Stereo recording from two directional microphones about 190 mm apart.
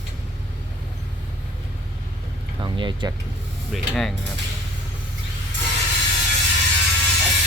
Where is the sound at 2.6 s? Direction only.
25° right (ahead or behind).